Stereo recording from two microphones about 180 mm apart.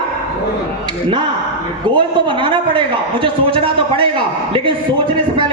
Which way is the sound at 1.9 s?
25° right (ahead or behind).